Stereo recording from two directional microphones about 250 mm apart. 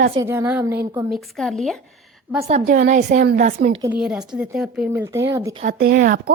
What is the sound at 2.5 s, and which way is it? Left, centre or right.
A woman's voice, right.